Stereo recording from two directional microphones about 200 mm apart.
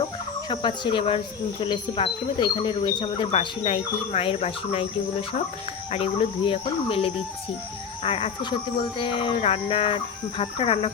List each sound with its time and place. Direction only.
0.0 s chicken: 25° left (ahead or behind)
1.6 s speech: 25° left (ahead or behind)
5.9 s speech: 30° left (ahead or behind)